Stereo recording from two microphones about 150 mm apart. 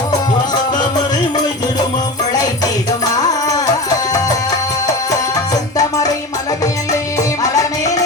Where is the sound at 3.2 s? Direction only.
25° left (ahead or behind).